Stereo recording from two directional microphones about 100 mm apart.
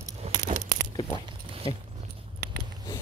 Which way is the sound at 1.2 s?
65° right (ahead or behind).